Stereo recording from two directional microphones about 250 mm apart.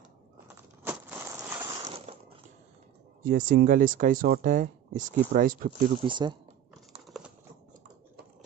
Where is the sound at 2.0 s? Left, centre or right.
Right.